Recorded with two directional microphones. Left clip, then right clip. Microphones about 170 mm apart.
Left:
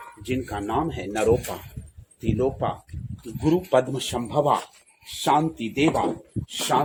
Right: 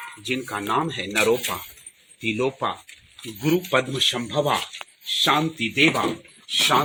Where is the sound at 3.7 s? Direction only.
15° left (ahead or behind).